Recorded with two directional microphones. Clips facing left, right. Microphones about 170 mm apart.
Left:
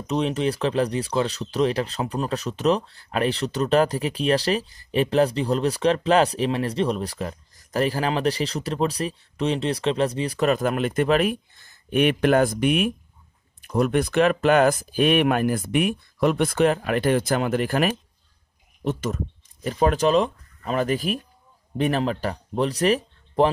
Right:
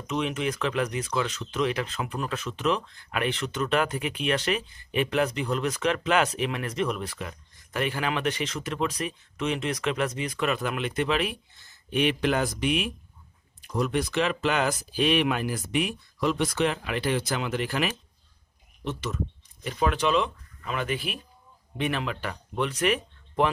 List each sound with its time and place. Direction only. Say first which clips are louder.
0.0 s speech: left 5 dB; 35° left (ahead or behind)
18.9 s speech: left 5 dB; 45° left (ahead or behind)